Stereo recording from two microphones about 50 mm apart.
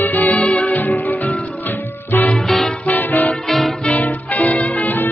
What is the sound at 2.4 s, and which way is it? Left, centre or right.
Music, centre.